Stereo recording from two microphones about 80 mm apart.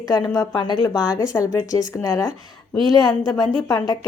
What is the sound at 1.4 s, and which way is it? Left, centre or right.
Speech, left.